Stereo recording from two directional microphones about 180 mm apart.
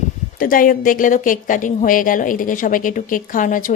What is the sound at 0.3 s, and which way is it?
A woman's voice, 50° left (ahead or behind).